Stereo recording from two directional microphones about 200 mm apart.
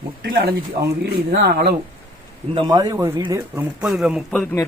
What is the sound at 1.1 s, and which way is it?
Speech, 55° right (ahead or behind).